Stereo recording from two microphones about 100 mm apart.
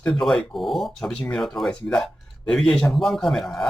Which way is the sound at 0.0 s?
5° left (ahead or behind).